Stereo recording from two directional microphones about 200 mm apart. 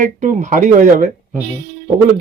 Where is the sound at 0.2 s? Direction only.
40° right (ahead or behind).